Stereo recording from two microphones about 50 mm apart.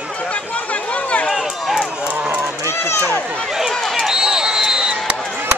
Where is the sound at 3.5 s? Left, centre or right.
Centre.